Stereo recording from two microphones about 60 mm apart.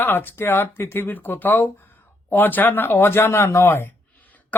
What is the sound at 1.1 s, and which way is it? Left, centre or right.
Speech, left.